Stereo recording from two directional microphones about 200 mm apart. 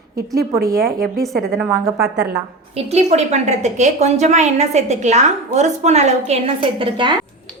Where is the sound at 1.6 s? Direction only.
5° right (ahead or behind).